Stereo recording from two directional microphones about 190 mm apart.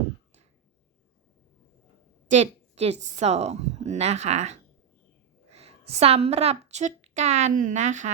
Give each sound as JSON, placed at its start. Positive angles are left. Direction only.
{"t": 2.3, "sound": "a woman's voice", "side_deg": -35}